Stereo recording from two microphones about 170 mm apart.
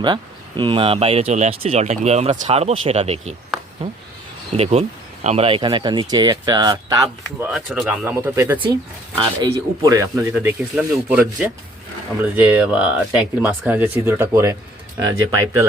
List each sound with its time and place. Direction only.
0.0 s speech: 30° right (ahead or behind)
4.5 s speech: 35° right (ahead or behind); by 7.1 s 20° right (ahead or behind)
7.3 s speech: 5° right (ahead or behind)
9.1 s speech: 25° right (ahead or behind)
10.3 s speech: 10° right (ahead or behind)